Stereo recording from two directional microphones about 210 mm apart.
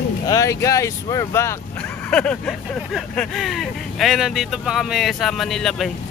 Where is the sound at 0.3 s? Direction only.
15° left (ahead or behind).